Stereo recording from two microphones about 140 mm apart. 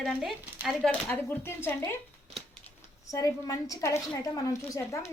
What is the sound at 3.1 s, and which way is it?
A woman's voice, 25° left (ahead or behind).